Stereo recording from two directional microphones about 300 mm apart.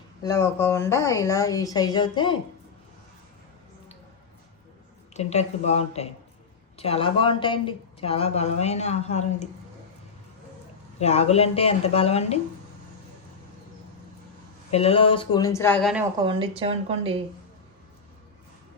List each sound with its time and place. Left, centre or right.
0.2 s speech: centre
5.1 s speech: left
11.0 s speech: left
14.7 s speech: centre
16.2 s speech: centre